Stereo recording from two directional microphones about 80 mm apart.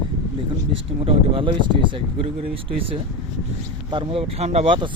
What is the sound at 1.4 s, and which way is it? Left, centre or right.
Speech, right.